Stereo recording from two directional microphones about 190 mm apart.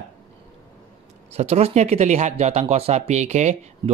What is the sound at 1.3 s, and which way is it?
Speech, 35° right (ahead or behind).